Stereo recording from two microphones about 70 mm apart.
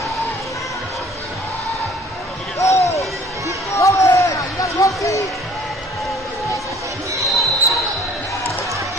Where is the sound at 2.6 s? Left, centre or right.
Left.